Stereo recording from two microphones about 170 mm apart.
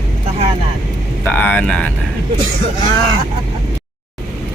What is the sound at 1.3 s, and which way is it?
Speech, 10° left (ahead or behind).